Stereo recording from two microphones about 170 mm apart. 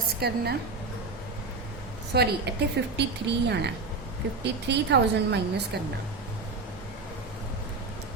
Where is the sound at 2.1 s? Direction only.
70° right (ahead or behind).